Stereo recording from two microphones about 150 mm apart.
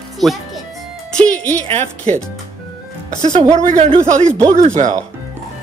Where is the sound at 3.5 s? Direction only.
45° right (ahead or behind).